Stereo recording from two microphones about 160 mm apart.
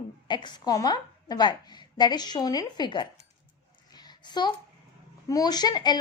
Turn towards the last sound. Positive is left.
turn(degrees=25)  # may be behind; listen again after turning